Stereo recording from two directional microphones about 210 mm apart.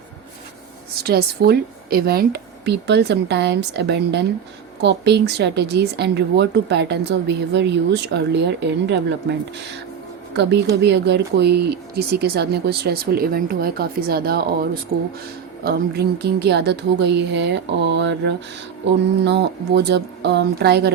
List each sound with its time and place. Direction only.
1.0 s speech: 45° right (ahead or behind)
10.3 s a woman's voice: 55° right (ahead or behind)